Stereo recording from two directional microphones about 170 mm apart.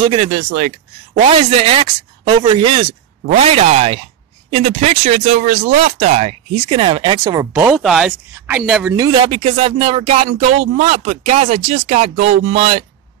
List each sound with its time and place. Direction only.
0.0 s speech: 30° right (ahead or behind)
0.3 s speech: 55° right (ahead or behind)
1.1 s speech: 35° right (ahead or behind)
7.5 s speech: 10° right (ahead or behind)
9.3 s speech: 35° right (ahead or behind)